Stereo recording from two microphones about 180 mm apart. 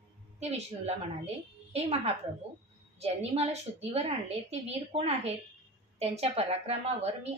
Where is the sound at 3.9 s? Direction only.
35° right (ahead or behind).